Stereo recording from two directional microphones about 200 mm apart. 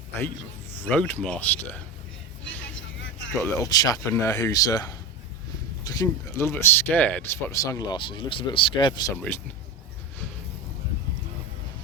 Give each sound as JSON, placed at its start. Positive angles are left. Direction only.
{"t": 0.8, "sound": "speech", "side_deg": 10}
{"t": 2.5, "sound": "vehicle", "side_deg": 10}
{"t": 3.4, "sound": "speech", "side_deg": 15}